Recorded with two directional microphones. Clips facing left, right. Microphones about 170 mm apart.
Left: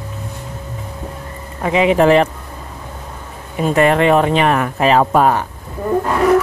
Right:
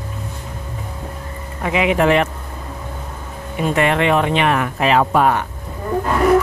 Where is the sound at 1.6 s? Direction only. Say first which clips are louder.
Left 4 dB; 35° left (ahead or behind).